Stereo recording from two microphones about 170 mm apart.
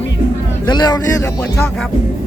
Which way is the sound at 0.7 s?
25° left (ahead or behind).